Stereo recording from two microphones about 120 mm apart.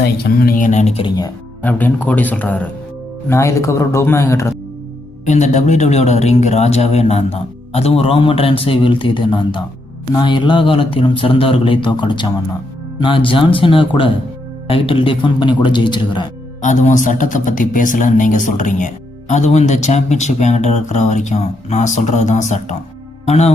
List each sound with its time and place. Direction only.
0.5 s speech: 90° left
1.6 s a man's voice: 15° left (ahead or behind)
3.2 s speech: 25° left (ahead or behind)
5.2 s a man's voice: 80° left; by 16.2 s 40° left (ahead or behind)
16.6 s a man's voice: 90° left
19.3 s speech: 70° left (ahead or behind)
23.2 s speech: 65° left (ahead or behind)